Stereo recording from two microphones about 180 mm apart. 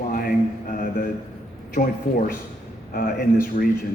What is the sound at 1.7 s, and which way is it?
A man's voice, 55° left (ahead or behind).